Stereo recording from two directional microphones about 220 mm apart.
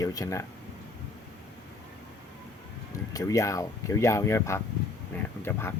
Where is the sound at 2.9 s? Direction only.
15° left (ahead or behind).